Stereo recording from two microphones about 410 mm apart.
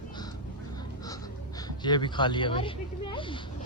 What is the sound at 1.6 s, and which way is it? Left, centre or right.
A man's voice, centre.